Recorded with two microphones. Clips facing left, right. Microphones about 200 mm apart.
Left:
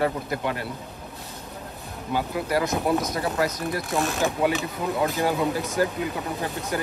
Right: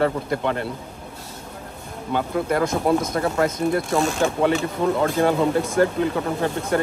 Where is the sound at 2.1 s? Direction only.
50° right (ahead or behind).